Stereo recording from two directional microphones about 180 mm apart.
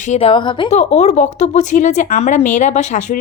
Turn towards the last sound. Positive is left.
turn(degrees=40)  # may be behind; listen again after turning